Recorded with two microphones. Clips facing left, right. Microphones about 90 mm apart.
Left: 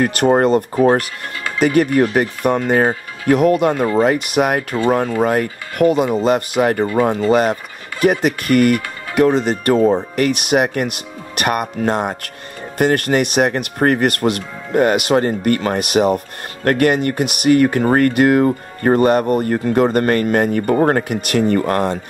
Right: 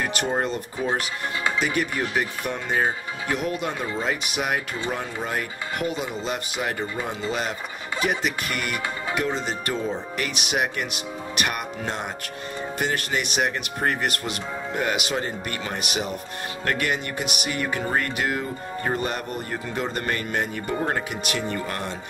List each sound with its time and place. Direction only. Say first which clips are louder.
0.0 s speech: left 11 dB; 55° left (ahead or behind)